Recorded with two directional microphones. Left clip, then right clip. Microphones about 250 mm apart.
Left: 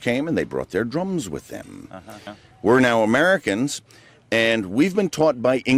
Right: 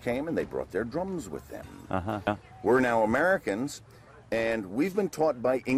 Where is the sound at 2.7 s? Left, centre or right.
Left.